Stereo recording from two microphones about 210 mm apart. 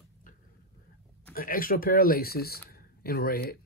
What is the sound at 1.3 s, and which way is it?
Speech, 40° left (ahead or behind).